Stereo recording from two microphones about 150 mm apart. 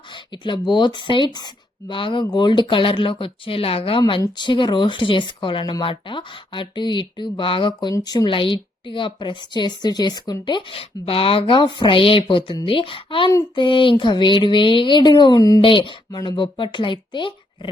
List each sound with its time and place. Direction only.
0.4 s speech: 30° left (ahead or behind)
15.6 s speech: 35° left (ahead or behind)